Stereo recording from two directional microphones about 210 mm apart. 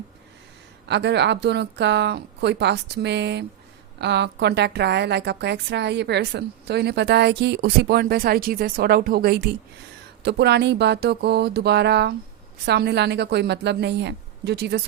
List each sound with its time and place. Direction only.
0.9 s a woman's voice: 55° right (ahead or behind)